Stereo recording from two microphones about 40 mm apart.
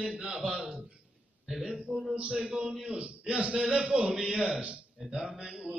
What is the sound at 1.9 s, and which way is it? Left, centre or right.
Speech, right.